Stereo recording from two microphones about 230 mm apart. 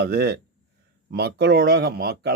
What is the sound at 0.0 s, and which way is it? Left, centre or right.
Speech, right.